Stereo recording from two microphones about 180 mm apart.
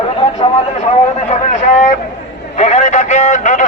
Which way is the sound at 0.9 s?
40° left (ahead or behind).